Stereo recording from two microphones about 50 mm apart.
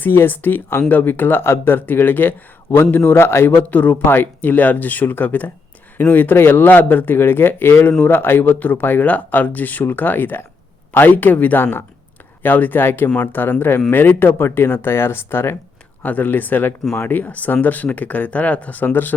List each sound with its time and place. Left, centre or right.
0.0 s speech: left
3.2 s speech: left
3.7 s speech: left
4.4 s speech: left
16.0 s speech: left